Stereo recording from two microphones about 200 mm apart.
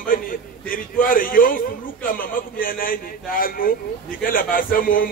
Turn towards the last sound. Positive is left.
turn(degrees=45)  # may be behind; listen again after turning